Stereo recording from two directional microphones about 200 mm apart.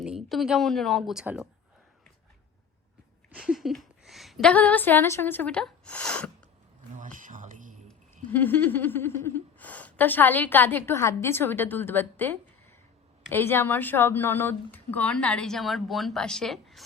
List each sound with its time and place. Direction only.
0.0 s speech: centre (ahead or behind)
3.3 s a woman's voice: 5° right (ahead or behind)
6.9 s a sound: 40° right (ahead or behind)
7.9 s gasp: 10° left (ahead or behind)